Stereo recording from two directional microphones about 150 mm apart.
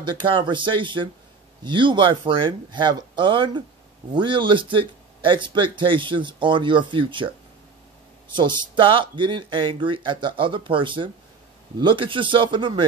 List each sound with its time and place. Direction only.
0.0 s speech: 30° right (ahead or behind)
8.3 s speech: 30° right (ahead or behind)